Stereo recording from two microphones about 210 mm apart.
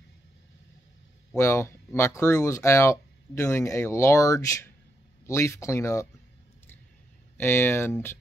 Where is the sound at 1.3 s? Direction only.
10° left (ahead or behind).